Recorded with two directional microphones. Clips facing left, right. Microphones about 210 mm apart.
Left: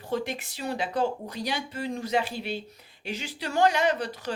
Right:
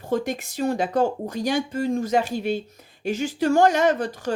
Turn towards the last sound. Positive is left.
turn(degrees=-45)  # may be behind; listen again after turning